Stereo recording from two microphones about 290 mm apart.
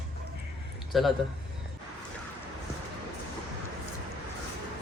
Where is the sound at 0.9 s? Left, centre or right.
Centre.